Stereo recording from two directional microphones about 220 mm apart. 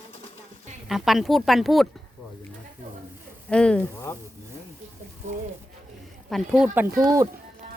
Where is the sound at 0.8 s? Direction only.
Centre (ahead or behind).